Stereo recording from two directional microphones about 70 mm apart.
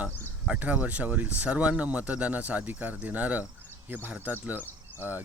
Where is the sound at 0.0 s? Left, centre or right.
Centre.